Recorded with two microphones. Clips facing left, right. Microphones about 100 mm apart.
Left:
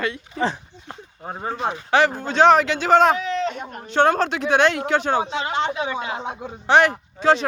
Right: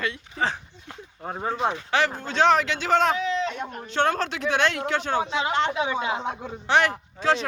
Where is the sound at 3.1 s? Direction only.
50° left (ahead or behind).